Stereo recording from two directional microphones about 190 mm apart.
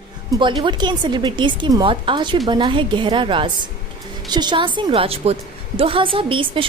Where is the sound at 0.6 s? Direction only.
25° right (ahead or behind).